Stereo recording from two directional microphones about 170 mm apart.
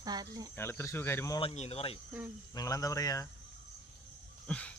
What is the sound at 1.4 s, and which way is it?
Speech, 35° left (ahead or behind).